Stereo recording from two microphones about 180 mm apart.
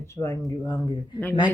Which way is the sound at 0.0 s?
15° left (ahead or behind).